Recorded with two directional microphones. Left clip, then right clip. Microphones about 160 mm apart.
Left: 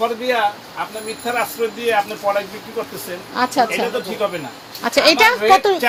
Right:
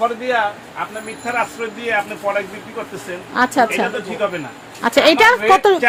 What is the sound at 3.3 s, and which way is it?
Speech, 35° right (ahead or behind).